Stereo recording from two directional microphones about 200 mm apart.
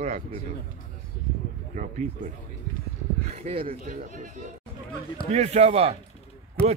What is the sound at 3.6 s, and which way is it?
Speech, 40° right (ahead or behind).